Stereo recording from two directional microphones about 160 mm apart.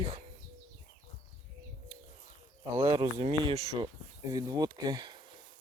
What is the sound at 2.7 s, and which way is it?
Speech, 20° right (ahead or behind).